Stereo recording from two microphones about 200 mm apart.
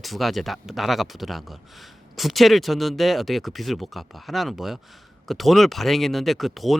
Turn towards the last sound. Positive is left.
turn(degrees=0)  # may be behind; listen again after turning